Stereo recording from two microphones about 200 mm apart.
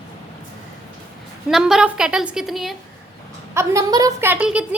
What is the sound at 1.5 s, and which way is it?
A woman's voice, 5° right (ahead or behind).